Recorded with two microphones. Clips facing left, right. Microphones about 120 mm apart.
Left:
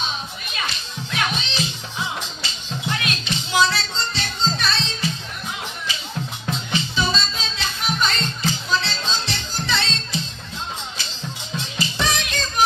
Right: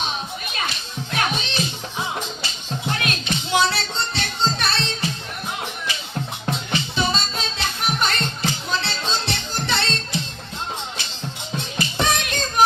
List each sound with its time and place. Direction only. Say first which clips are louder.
1.1 s music: right 1 dB; 50° right (ahead or behind)
6.4 s music: even; 55° right (ahead or behind)
11.5 s music: right 1 dB; 55° right (ahead or behind)